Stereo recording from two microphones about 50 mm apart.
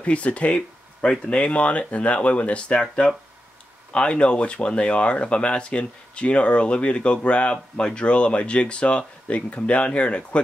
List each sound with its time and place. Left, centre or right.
0.0 s speech: left
2.8 s speech: centre
3.9 s speech: left